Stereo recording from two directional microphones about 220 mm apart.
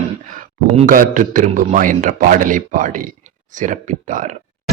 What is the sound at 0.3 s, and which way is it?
A man's voice, 35° right (ahead or behind).